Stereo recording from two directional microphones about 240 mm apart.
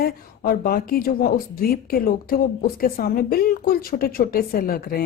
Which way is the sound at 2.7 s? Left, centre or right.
Left.